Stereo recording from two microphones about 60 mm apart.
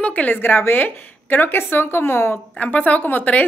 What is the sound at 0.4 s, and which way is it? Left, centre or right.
Speech, left.